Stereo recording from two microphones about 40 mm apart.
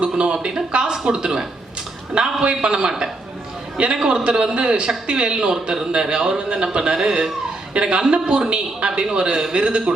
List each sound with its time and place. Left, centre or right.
0.0 s a man's voice: right
4.0 s a man's voice: centre
7.7 s a man's voice: right
9.3 s speech: centre
9.6 s a man's voice: right